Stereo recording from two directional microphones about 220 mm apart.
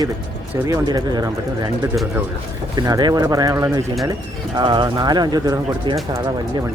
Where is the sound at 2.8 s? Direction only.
20° right (ahead or behind).